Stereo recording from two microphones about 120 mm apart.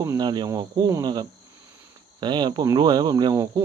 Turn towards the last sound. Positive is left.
turn(degrees=-35)  # may be behind; listen again after turning